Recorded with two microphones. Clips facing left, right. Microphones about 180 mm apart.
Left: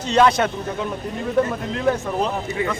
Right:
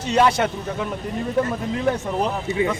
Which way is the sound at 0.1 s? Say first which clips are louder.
Left 2 dB; 10° right (ahead or behind).